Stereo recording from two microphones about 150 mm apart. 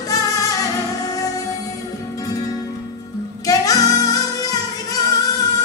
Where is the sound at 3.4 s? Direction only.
25° left (ahead or behind).